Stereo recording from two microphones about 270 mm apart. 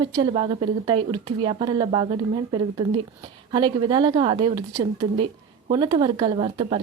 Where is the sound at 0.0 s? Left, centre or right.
Centre.